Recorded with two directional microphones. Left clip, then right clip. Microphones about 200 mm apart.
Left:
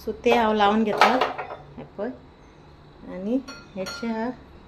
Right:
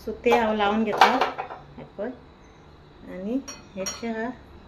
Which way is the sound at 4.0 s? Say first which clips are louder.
Left 3 dB; 20° left (ahead or behind).